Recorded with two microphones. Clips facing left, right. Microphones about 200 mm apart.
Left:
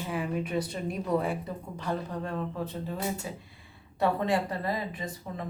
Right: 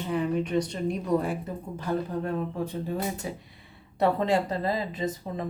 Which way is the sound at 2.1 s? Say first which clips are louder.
Right 4 dB; 10° right (ahead or behind).